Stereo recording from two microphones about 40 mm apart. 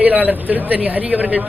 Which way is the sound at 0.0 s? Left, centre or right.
Right.